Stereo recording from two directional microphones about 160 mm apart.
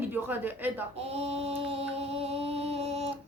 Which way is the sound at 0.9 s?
40° right (ahead or behind).